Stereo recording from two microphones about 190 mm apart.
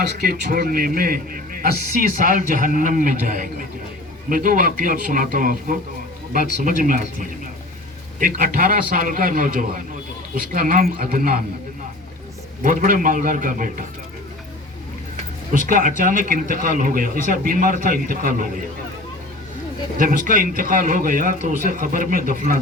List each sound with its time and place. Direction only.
0.0 s speech: 55° right (ahead or behind)
6.8 s speech: 45° right (ahead or behind)
12.8 s speech: 45° right (ahead or behind)
15.5 s speech: 45° right (ahead or behind)
20.0 s speech: 45° right (ahead or behind)